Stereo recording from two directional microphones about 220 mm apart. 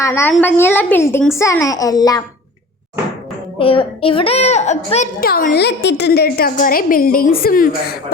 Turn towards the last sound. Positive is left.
turn(degrees=40)  # may be behind; listen again after turning